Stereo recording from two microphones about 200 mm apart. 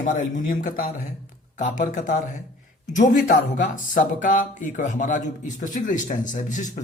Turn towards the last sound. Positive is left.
turn(degrees=40)  # may be behind; listen again after turning